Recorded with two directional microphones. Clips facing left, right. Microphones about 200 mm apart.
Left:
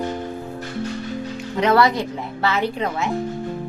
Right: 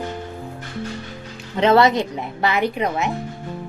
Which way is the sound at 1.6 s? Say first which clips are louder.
Right 2 dB; 25° right (ahead or behind).